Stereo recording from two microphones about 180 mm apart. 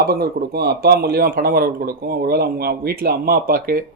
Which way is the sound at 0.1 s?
60° right (ahead or behind).